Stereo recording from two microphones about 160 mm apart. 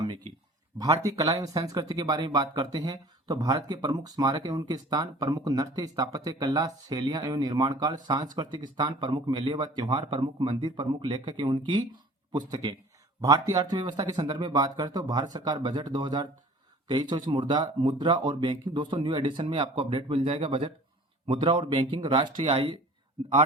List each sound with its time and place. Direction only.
0.8 s speech: 20° right (ahead or behind)